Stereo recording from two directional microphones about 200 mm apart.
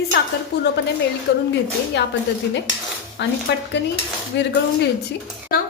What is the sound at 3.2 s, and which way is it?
A woman's voice, 60° left (ahead or behind).